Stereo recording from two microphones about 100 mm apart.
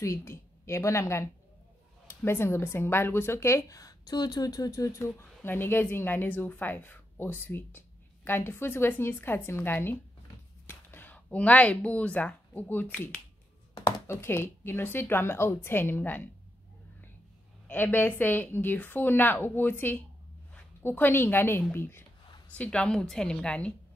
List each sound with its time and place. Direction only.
0.0 s speech: 30° left (ahead or behind)
14.0 s speech: 25° left (ahead or behind)
17.6 s speech: 20° left (ahead or behind)
22.6 s a woman's voice: 10° left (ahead or behind)